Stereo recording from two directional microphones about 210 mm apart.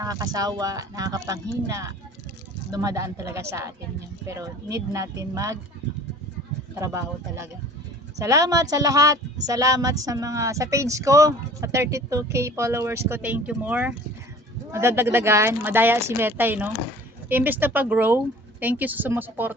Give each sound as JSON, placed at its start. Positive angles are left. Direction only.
{"t": 0.0, "sound": "speech", "side_deg": -15}
{"t": 6.7, "sound": "speech", "side_deg": -15}